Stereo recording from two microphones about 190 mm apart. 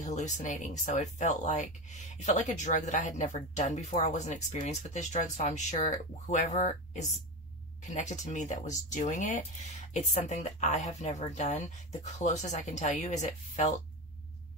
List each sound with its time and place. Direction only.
0.0 s speech: 40° left (ahead or behind)